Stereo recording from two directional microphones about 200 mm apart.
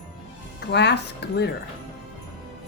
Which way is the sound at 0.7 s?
60° left (ahead or behind).